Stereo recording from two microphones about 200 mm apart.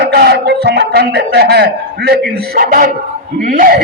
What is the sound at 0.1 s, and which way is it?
A man's voice, 55° right (ahead or behind).